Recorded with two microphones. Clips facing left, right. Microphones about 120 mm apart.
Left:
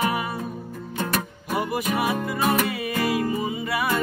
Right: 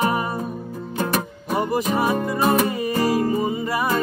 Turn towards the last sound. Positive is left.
turn(degrees=-30)  # may be behind; listen again after turning